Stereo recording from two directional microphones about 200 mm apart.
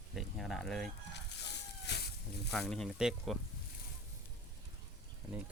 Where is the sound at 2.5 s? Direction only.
5° left (ahead or behind).